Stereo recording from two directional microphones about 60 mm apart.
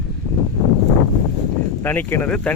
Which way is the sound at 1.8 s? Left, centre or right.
Left.